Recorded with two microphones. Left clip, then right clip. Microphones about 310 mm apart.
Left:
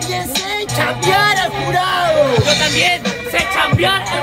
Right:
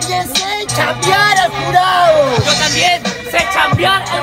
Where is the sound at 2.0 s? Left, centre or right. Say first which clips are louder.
Right 2 dB; centre.